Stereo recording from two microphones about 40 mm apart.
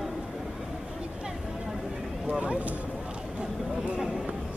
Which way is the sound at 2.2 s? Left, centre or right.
Right.